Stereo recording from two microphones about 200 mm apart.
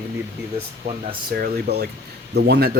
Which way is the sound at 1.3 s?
55° right (ahead or behind).